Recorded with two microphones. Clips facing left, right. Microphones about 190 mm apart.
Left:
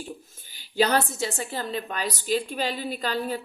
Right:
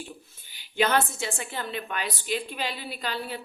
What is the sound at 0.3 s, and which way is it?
A woman's voice, 45° left (ahead or behind).